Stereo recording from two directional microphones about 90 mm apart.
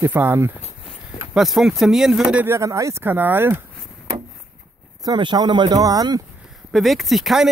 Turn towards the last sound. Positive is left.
turn(degrees=-5)  # may be behind; listen again after turning